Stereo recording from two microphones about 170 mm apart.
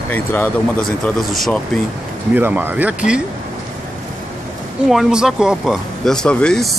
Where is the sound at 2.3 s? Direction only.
10° right (ahead or behind).